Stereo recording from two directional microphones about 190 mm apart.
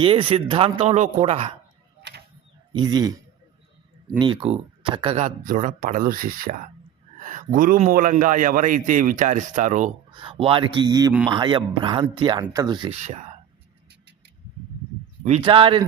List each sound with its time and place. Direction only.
0.0 s speech: 25° right (ahead or behind)
2.0 s a sound: 60° right (ahead or behind)
2.7 s speech: 20° right (ahead or behind)
4.2 s speech: 25° right (ahead or behind)
5.2 s a man's voice: 45° right (ahead or behind)
10.1 s speech: 25° right (ahead or behind)
13.0 s speech: 35° right (ahead or behind)
15.4 s speech: 25° right (ahead or behind)